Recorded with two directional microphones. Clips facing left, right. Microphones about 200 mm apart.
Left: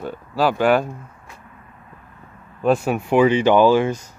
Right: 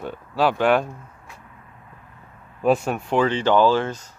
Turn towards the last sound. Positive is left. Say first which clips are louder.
# left 4 dB
turn(degrees=10)  # may be behind; listen again after turning